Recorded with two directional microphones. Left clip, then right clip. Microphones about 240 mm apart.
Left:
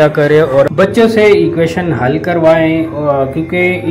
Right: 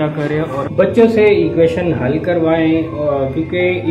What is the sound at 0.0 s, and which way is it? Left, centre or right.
A man's voice, left.